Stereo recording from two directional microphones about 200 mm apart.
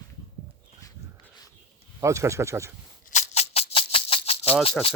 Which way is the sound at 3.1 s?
35° left (ahead or behind).